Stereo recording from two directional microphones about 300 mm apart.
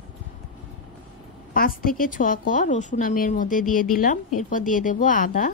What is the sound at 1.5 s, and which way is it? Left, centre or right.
A woman's voice, left.